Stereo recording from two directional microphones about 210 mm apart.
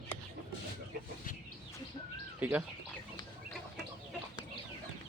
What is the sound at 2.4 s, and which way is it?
Speech, 10° right (ahead or behind).